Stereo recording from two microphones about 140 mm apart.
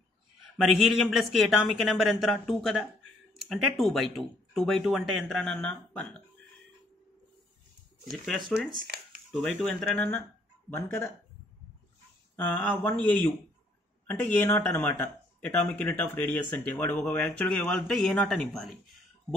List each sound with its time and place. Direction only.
0.4 s speech: centre (ahead or behind)
8.1 s speech: centre (ahead or behind)
9.9 s speech: 15° left (ahead or behind)
12.4 s speech: 10° left (ahead or behind)